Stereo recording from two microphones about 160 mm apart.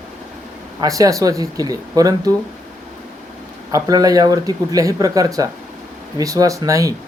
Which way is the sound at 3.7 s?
20° right (ahead or behind).